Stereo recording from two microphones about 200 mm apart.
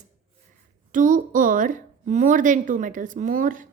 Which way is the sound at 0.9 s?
40° right (ahead or behind).